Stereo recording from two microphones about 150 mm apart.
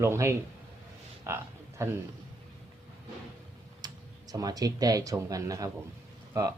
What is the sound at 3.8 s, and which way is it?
Speech, 25° right (ahead or behind).